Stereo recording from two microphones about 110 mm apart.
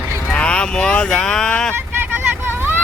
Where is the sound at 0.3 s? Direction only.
10° left (ahead or behind).